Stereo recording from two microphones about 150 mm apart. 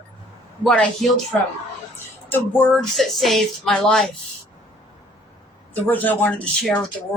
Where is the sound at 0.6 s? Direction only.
5° left (ahead or behind).